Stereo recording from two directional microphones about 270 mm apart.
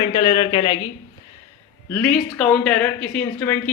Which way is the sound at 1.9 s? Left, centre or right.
Centre.